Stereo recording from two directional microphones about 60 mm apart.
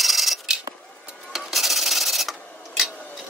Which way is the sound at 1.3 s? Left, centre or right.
Centre.